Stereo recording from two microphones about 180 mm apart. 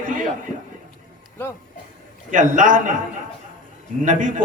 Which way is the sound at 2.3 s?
45° right (ahead or behind).